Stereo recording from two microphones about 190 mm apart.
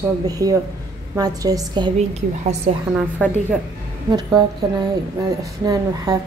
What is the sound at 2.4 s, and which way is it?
Speech, 35° right (ahead or behind).